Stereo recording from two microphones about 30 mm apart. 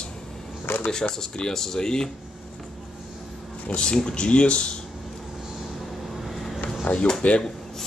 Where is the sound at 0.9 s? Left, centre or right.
Centre.